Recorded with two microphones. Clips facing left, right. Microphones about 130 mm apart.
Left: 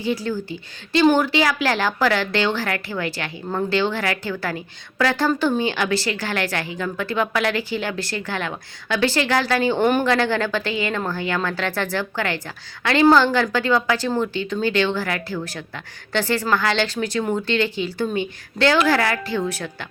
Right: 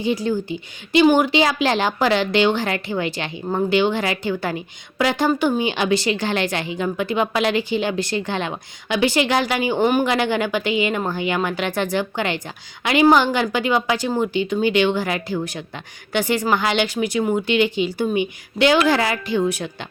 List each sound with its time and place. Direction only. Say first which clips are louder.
0.0 s a woman's voice: right 3 dB; 20° right (ahead or behind)